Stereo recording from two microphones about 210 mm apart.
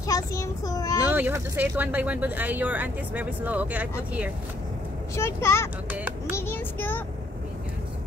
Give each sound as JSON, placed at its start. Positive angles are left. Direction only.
{"t": 0.0, "sound": "a child's voice", "side_deg": 15}
{"t": 1.0, "sound": "speech", "side_deg": -10}
{"t": 5.1, "sound": "a child's voice", "side_deg": 10}
{"t": 5.9, "sound": "a child's voice", "side_deg": -10}
{"t": 6.3, "sound": "child singing", "side_deg": 10}